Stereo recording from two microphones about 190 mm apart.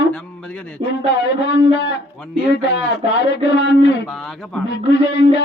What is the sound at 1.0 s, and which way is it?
A man's voice, 65° left (ahead or behind).